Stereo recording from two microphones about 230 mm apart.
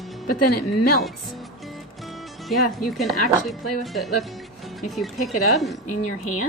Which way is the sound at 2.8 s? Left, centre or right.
Centre.